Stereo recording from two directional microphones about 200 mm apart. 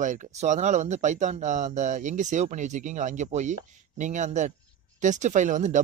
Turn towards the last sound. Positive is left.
turn(degrees=-40)  # may be behind; listen again after turning